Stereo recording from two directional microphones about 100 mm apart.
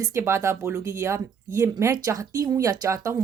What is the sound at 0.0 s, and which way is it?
Speech, 30° right (ahead or behind).